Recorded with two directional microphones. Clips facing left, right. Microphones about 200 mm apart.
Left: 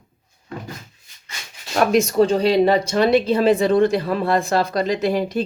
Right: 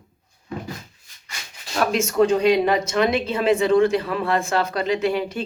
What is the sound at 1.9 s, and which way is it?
Speech, 35° left (ahead or behind).